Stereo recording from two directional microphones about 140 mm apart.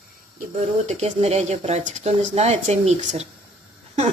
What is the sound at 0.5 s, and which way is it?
Speech, 50° right (ahead or behind).